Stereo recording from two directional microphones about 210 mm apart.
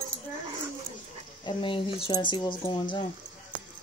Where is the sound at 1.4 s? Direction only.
25° left (ahead or behind).